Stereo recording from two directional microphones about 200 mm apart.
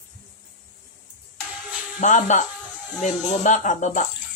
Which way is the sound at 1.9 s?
40° left (ahead or behind).